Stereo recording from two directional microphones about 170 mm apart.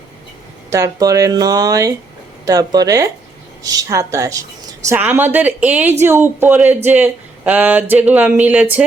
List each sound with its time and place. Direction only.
0.7 s speech: 20° right (ahead or behind)